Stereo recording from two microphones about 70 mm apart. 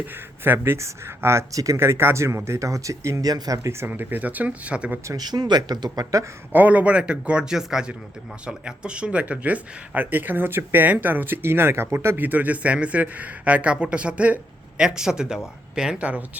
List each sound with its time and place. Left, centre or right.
0.0 s speech: right
1.8 s speech: right
3.2 s speech: right
3.8 s speech: right
5.1 s speech: right
6.5 s speech: right